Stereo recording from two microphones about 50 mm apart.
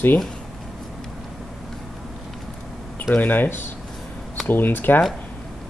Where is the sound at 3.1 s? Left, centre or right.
Left.